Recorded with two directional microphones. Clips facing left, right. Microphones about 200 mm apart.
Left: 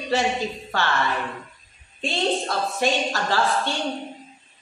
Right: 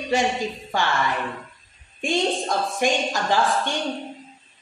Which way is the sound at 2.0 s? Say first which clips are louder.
Right 1 dB; 15° right (ahead or behind).